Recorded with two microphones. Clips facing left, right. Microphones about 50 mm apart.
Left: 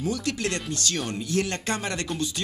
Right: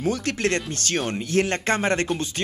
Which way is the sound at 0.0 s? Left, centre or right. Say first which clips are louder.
Right 4 dB; right.